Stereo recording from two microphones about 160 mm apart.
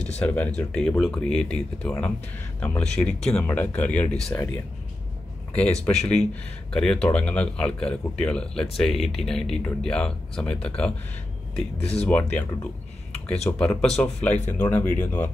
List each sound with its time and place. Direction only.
0.2 s speech: 10° left (ahead or behind)
5.9 s speech: 5° left (ahead or behind)
11.8 s speech: 40° left (ahead or behind)
12.1 s speech: 10° left (ahead or behind)